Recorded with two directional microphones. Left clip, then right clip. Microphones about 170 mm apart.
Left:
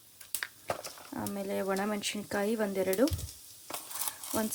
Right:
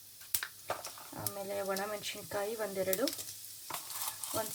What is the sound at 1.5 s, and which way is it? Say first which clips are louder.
Speech: left 4 dB; 50° left (ahead or behind).